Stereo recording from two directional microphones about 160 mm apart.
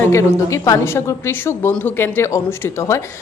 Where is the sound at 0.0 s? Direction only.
20° left (ahead or behind).